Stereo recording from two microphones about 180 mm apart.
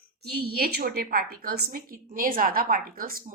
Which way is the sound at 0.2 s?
60° right (ahead or behind).